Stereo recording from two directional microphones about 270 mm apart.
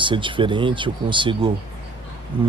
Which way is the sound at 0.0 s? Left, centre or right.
Centre.